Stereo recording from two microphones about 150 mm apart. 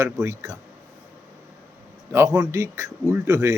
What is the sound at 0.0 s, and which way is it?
Speech, 20° right (ahead or behind).